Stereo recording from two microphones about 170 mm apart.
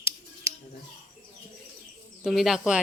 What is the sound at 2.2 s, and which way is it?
Speech, centre (ahead or behind).